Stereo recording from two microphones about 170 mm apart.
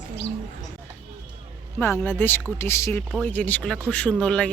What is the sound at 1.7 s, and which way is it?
Speech, 15° left (ahead or behind).